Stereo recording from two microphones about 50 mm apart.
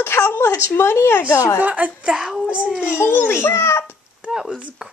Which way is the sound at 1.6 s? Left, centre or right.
Right.